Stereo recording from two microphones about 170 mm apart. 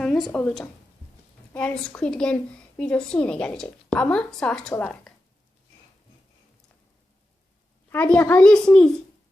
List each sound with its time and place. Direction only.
0.0 s a woman's voice: 5° left (ahead or behind)
7.9 s a woman's voice: 10° left (ahead or behind)